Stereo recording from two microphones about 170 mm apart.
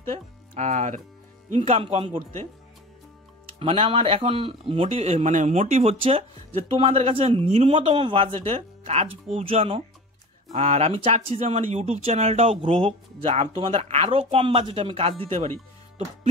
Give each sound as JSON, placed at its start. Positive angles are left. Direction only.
{"t": 0.6, "sound": "speech", "side_deg": -40}
{"t": 3.5, "sound": "speech", "side_deg": -35}